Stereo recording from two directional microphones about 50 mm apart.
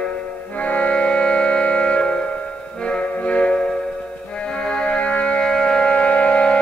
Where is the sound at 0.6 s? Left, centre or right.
Left.